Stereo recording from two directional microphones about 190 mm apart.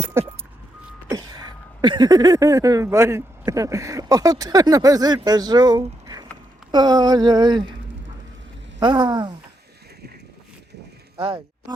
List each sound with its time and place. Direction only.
0.1 s vehicle: 10° right (ahead or behind)
1.0 s speech: 20° right (ahead or behind)
8.8 s speech: 25° right (ahead or behind)